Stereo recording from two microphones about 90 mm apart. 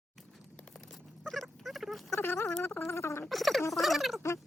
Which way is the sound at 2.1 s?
25° left (ahead or behind).